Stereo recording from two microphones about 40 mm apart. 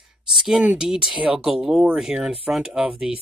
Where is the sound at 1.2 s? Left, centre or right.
Right.